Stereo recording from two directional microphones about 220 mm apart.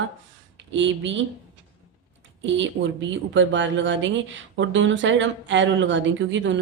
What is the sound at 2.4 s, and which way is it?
A woman's voice, 55° right (ahead or behind).